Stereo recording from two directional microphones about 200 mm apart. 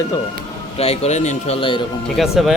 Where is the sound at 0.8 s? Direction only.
30° left (ahead or behind).